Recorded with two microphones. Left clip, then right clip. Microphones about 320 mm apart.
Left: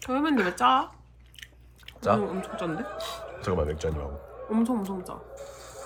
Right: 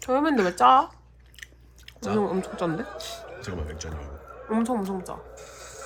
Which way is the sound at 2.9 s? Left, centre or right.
Centre.